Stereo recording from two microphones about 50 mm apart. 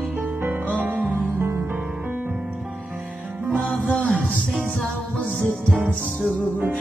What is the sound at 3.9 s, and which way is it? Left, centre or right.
Music, left.